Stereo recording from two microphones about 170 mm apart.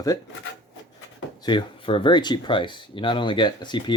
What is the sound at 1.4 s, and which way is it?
Speech, 25° left (ahead or behind).